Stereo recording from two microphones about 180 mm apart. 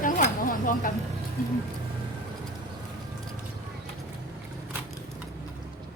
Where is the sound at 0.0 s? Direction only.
50° left (ahead or behind).